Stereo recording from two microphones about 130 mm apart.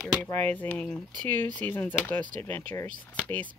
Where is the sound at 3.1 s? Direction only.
15° left (ahead or behind).